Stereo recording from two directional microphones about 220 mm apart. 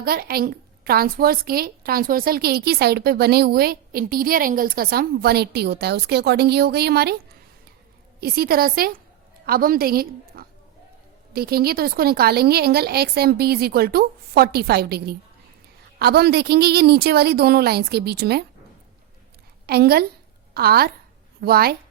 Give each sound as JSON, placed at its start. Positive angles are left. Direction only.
{"t": 0.0, "sound": "a woman's voice", "side_deg": -45}
{"t": 8.2, "sound": "a woman's voice", "side_deg": -45}
{"t": 19.6, "sound": "a woman's voice", "side_deg": -45}